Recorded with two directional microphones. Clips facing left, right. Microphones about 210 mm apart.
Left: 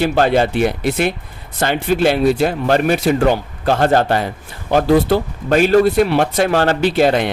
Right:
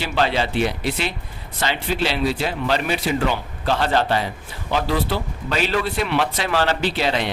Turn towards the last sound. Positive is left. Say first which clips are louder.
# left 8 dB
turn(degrees=50)  # may be behind; listen again after turning